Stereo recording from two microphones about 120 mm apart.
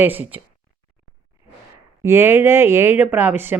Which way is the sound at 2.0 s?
20° right (ahead or behind).